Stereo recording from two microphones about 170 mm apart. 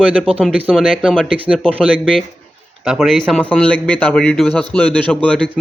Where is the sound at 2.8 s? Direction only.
Centre (ahead or behind).